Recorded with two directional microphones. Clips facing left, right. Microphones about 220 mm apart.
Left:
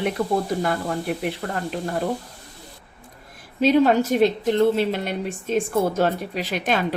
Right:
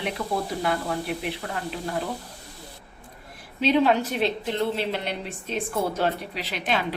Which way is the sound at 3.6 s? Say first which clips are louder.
Left 4 dB; 45° left (ahead or behind).